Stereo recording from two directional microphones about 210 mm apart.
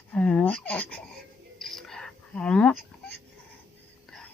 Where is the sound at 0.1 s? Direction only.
5° left (ahead or behind).